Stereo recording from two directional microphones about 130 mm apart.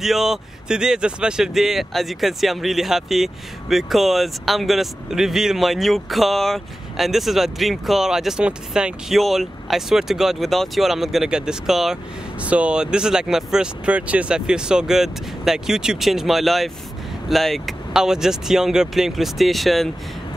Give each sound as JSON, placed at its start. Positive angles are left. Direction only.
{"t": 0.0, "sound": "speech", "side_deg": 0}